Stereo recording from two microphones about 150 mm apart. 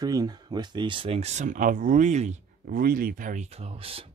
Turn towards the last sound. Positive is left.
turn(degrees=-40)  # may be behind; listen again after turning